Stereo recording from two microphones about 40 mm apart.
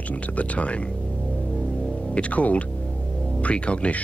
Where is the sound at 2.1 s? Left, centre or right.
Left.